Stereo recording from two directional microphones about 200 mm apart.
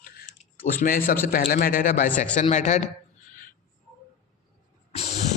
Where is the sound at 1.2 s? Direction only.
45° left (ahead or behind).